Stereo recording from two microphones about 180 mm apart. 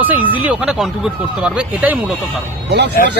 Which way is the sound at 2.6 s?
70° right (ahead or behind).